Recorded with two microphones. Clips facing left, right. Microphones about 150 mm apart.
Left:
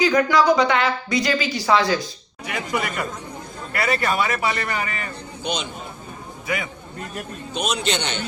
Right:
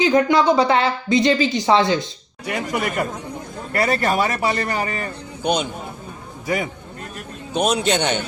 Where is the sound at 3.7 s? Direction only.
40° right (ahead or behind).